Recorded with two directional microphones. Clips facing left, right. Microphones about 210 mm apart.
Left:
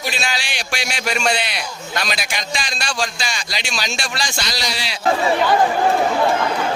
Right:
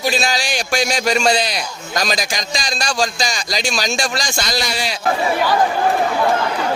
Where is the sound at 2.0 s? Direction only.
40° right (ahead or behind).